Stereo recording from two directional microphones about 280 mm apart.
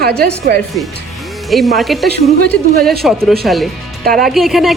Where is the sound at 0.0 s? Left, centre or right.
Right.